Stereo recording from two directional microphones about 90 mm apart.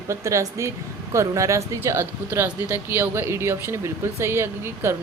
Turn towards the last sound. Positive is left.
turn(degrees=-30)  # may be behind; listen again after turning